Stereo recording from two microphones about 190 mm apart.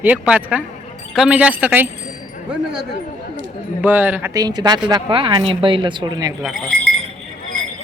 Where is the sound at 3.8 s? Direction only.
10° right (ahead or behind).